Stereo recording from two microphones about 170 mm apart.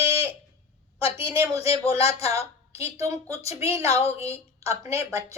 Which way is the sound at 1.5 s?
35° left (ahead or behind).